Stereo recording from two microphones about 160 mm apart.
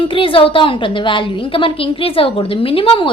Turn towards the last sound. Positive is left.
turn(degrees=35)  # may be behind; listen again after turning